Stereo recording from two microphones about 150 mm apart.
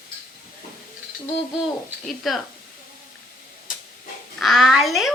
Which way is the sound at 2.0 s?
Centre (ahead or behind).